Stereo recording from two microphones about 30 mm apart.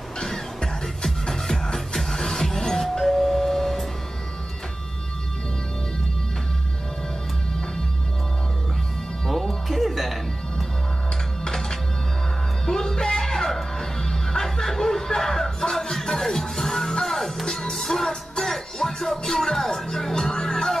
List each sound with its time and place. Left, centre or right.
0.2 s music: centre
9.7 s music: centre
11.4 s music: centre